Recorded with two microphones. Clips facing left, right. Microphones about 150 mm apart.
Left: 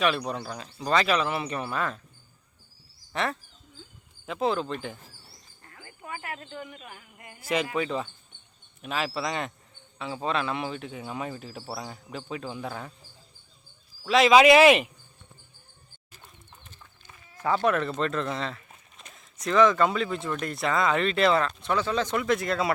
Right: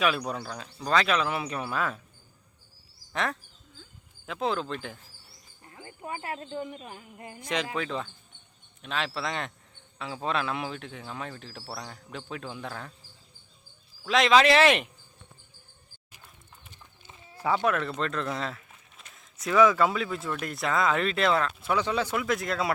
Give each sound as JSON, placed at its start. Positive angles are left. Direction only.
{"t": 0.0, "sound": "speech", "side_deg": 0}
{"t": 3.1, "sound": "speech", "side_deg": 0}
{"t": 5.6, "sound": "speech", "side_deg": -20}
{"t": 7.4, "sound": "speech", "side_deg": 5}
{"t": 14.0, "sound": "speech", "side_deg": 5}
{"t": 16.6, "sound": "a sound", "side_deg": -20}
{"t": 17.6, "sound": "speech", "side_deg": 0}